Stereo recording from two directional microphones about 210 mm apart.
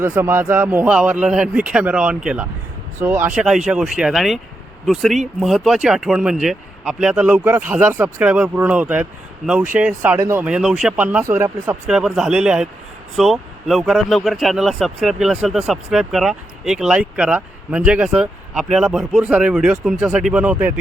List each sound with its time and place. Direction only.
0.0 s speech: 10° right (ahead or behind)